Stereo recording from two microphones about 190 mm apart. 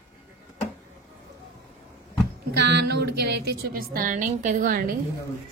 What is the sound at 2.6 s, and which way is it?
Speech, 60° right (ahead or behind).